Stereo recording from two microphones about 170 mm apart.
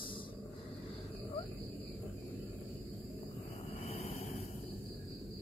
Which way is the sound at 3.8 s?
40° left (ahead or behind).